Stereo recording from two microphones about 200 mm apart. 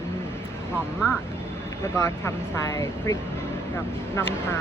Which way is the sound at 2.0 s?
15° left (ahead or behind).